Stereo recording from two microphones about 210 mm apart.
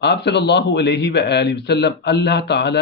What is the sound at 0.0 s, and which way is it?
A man's voice, 55° left (ahead or behind).